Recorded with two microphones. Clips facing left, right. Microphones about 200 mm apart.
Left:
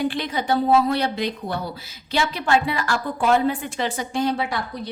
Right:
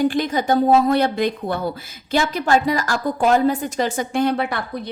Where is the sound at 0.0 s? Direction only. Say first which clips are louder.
Right 5 dB; 45° right (ahead or behind).